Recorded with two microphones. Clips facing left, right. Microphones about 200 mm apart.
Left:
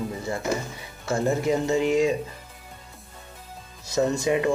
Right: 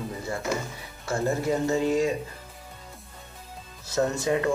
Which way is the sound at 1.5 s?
20° left (ahead or behind).